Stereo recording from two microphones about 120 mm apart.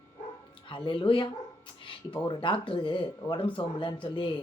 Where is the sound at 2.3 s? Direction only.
45° left (ahead or behind).